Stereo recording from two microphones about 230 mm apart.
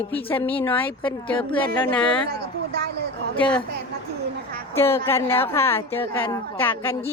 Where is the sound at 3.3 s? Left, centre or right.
Centre.